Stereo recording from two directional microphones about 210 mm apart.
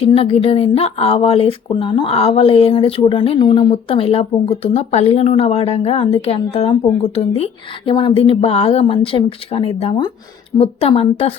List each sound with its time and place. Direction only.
0.0 s speech: 25° left (ahead or behind)